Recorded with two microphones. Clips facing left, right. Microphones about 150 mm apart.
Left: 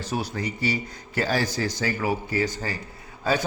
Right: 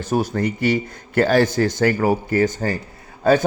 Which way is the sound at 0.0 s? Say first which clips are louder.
Right 8 dB; 50° right (ahead or behind).